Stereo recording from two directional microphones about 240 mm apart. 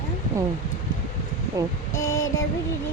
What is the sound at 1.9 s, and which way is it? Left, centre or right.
Speech, centre.